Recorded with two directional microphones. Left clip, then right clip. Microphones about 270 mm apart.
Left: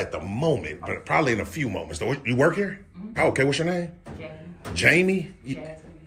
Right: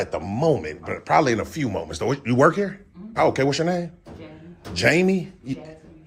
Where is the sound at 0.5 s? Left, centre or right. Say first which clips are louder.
Right 2 dB; centre.